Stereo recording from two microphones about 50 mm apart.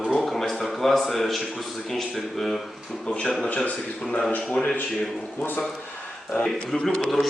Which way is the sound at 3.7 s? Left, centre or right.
Left.